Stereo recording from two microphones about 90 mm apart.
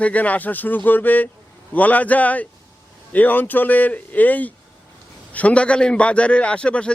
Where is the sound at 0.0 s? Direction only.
15° left (ahead or behind).